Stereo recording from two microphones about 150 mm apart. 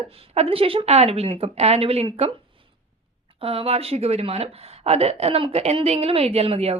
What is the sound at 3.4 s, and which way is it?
Speech, 40° right (ahead or behind).